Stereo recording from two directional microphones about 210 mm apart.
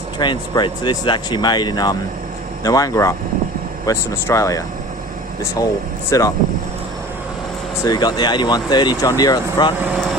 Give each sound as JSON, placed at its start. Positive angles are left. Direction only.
{"t": 0.2, "sound": "speech", "side_deg": 20}
{"t": 6.1, "sound": "speech", "side_deg": 15}
{"t": 7.8, "sound": "speech", "side_deg": 20}